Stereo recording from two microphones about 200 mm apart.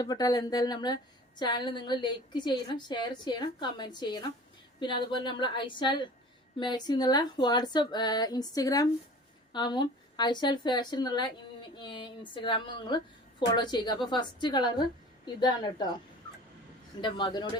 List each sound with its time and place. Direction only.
0.0 s a woman's voice: 20° left (ahead or behind)
17.0 s a woman's voice: 20° left (ahead or behind)